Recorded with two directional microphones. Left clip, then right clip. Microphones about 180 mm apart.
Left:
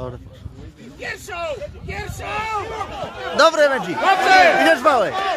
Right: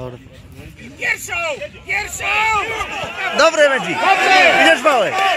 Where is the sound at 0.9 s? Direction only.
55° left (ahead or behind).